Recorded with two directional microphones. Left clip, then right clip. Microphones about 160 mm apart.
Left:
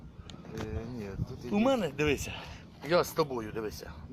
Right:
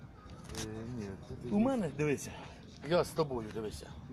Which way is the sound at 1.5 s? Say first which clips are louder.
Left 5 dB; 15° left (ahead or behind).